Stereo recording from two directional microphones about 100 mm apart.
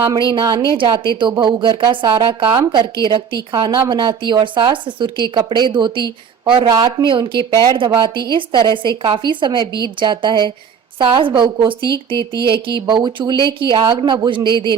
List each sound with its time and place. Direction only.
0.2 s a woman's voice: 55° right (ahead or behind)
11.9 s speech: 35° left (ahead or behind)
12.9 s a woman's voice: 50° right (ahead or behind)